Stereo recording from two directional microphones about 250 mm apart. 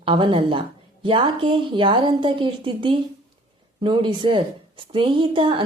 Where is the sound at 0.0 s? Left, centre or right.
Right.